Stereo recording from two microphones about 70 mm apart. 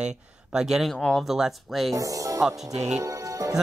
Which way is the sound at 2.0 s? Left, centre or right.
Right.